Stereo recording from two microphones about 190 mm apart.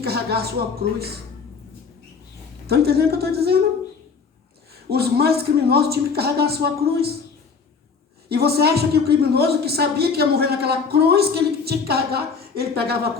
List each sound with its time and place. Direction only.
0.0 s a woman's voice: 55° right (ahead or behind)
2.6 s a woman's voice: 55° right (ahead or behind)
4.7 s a woman's voice: 55° right (ahead or behind)
8.3 s a woman's voice: 55° right (ahead or behind)